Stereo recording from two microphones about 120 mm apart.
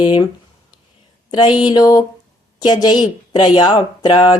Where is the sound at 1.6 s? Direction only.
35° left (ahead or behind).